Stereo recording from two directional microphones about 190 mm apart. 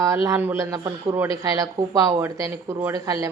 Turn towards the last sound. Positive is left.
turn(degrees=-20)  # may be behind; listen again after turning